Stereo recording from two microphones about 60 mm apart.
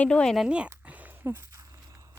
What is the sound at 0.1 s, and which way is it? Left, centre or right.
Speech, centre.